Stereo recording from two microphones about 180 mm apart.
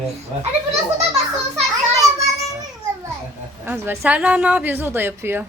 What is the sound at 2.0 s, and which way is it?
Children playing, 20° right (ahead or behind).